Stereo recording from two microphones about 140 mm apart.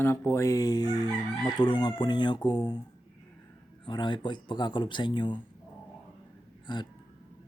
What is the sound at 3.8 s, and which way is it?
Chicken, 35° left (ahead or behind).